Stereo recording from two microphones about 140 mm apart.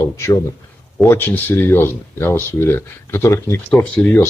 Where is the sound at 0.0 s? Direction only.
20° left (ahead or behind).